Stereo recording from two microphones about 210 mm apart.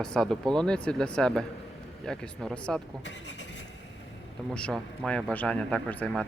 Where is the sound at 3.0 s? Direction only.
55° left (ahead or behind).